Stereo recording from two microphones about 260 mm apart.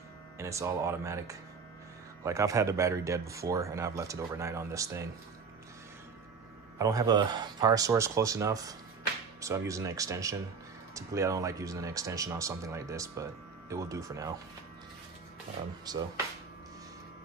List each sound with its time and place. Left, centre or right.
0.4 s speech: centre
6.8 s speech: centre
15.9 s speech: centre